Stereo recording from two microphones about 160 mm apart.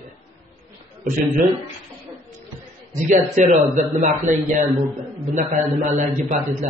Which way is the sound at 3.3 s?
50° right (ahead or behind).